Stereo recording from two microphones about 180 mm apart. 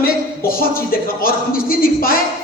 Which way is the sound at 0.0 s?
55° left (ahead or behind).